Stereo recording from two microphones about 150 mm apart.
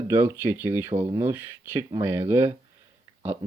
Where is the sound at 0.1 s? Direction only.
15° right (ahead or behind).